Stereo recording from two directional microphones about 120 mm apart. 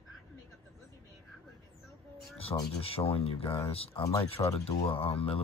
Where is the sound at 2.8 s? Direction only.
55° left (ahead or behind).